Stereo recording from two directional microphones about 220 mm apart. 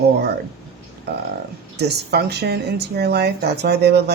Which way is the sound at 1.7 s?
50° right (ahead or behind).